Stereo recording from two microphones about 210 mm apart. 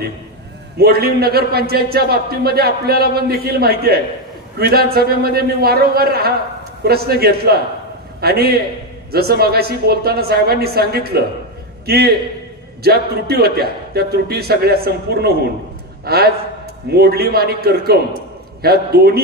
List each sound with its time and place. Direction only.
0.7 s a man's voice: 50° right (ahead or behind)